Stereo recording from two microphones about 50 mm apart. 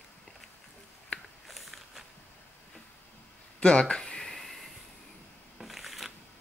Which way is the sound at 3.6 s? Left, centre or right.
Centre.